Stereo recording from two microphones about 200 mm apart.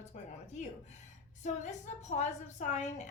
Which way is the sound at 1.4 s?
35° left (ahead or behind).